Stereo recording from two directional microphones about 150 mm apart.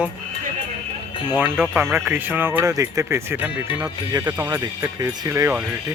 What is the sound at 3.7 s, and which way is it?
Speech, 25° right (ahead or behind).